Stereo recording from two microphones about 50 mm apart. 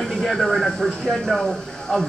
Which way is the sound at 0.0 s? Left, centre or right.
Centre.